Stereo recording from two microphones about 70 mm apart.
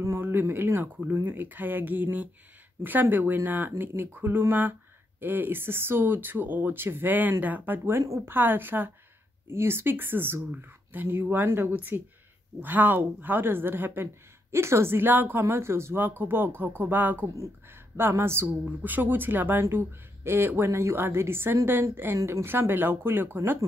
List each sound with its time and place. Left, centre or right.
0.0 s speech: right
15.4 s speech: right
18.7 s speech: right